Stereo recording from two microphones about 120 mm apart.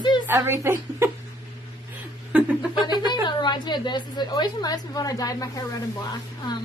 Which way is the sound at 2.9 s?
35° left (ahead or behind).